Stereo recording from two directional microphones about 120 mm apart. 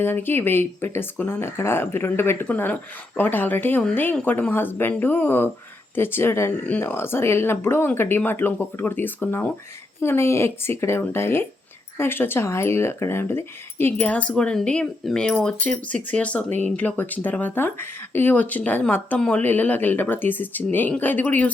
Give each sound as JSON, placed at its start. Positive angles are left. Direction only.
{"t": 0.0, "sound": "speech", "side_deg": 20}